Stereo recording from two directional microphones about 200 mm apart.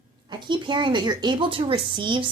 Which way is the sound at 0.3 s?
25° right (ahead or behind).